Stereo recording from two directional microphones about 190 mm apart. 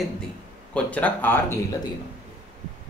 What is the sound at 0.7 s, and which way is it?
Speech, 10° left (ahead or behind).